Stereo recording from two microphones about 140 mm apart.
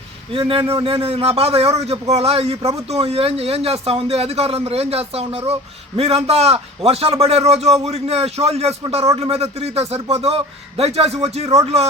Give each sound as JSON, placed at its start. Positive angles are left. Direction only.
{"t": 0.3, "sound": "speech", "side_deg": -40}